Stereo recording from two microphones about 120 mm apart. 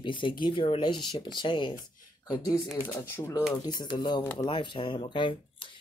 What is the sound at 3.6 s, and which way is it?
Speech, 40° left (ahead or behind).